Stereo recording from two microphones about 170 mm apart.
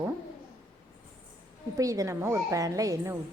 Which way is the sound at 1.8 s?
20° right (ahead or behind).